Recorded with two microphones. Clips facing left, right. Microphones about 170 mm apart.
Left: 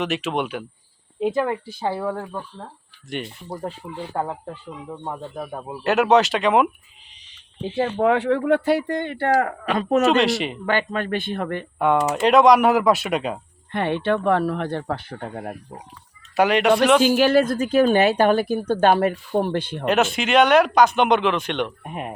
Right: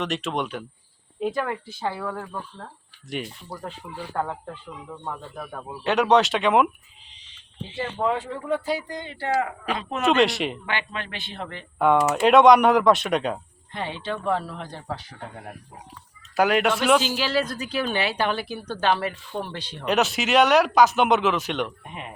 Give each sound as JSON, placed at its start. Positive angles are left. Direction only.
{"t": 0.0, "sound": "speech", "side_deg": 5}
{"t": 1.2, "sound": "speech", "side_deg": 25}
{"t": 3.1, "sound": "speech", "side_deg": 0}
{"t": 3.5, "sound": "speech", "side_deg": 25}
{"t": 5.8, "sound": "speech", "side_deg": 5}
{"t": 7.8, "sound": "a woman's voice", "side_deg": 65}
{"t": 10.1, "sound": "speech", "side_deg": 0}
{"t": 10.7, "sound": "a woman's voice", "side_deg": 45}
{"t": 11.8, "sound": "speech", "side_deg": 0}
{"t": 13.7, "sound": "speech", "side_deg": 60}
{"t": 16.3, "sound": "speech", "side_deg": 0}
{"t": 17.0, "sound": "a woman's voice", "side_deg": 50}
{"t": 19.8, "sound": "speech", "side_deg": 0}
{"t": 21.8, "sound": "a woman's voice", "side_deg": 50}